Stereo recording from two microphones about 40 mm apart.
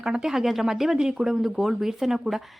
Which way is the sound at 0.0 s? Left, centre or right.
Centre.